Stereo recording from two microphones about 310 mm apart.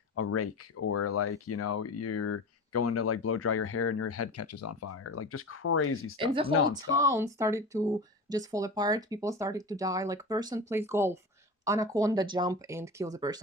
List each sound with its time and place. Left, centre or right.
0.2 s speech: left
6.1 s speech: centre